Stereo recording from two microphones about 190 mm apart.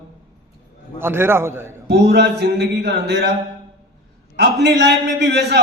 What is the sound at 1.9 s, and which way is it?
A man's voice, 60° right (ahead or behind).